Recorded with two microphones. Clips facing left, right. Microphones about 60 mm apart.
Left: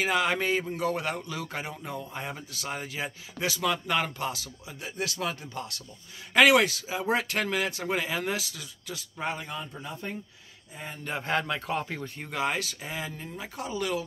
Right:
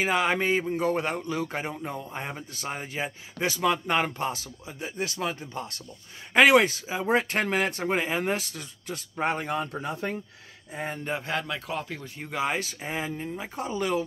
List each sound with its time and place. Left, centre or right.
0.0 s speech: right
11.1 s speech: centre
12.0 s speech: centre
12.5 s speech: right